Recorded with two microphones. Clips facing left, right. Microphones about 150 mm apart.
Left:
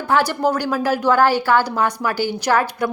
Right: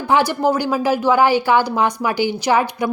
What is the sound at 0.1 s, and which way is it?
A woman's voice, 10° right (ahead or behind).